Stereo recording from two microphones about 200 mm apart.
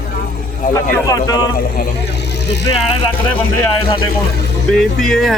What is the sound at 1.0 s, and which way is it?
Speech, 20° left (ahead or behind).